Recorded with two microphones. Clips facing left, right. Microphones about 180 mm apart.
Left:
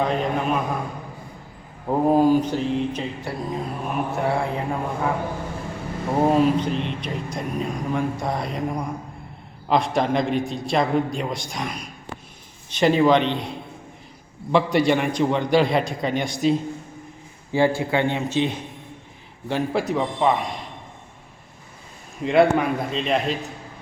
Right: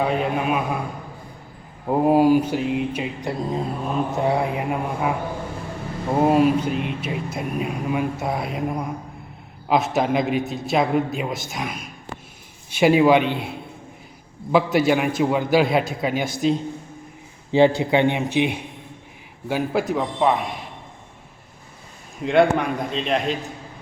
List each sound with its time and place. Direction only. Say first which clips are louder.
0.0 s speech: right 1 dB; 5° right (ahead or behind)
1.9 s a man's voice: right 1 dB; 10° right (ahead or behind)
17.5 s a man's voice: right 4 dB; 20° right (ahead or behind); by 20.6 s centre (ahead or behind)
22.2 s a man's voice: even; centre (ahead or behind)